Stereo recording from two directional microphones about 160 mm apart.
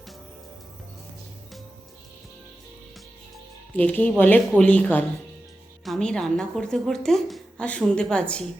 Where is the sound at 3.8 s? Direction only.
10° left (ahead or behind).